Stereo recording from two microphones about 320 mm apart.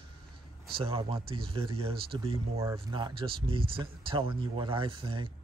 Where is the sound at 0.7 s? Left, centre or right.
Centre.